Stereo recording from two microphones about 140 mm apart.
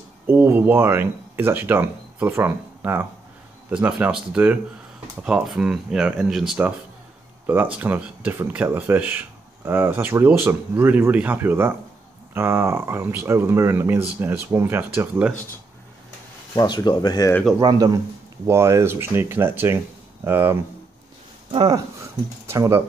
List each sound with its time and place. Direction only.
0.3 s speech: 15° right (ahead or behind)
7.7 s speech: 10° right (ahead or behind)
16.5 s speech: 30° left (ahead or behind)
17.6 s speech: 25° right (ahead or behind)
21.5 s speech: 35° right (ahead or behind)
22.5 s speech: 20° right (ahead or behind)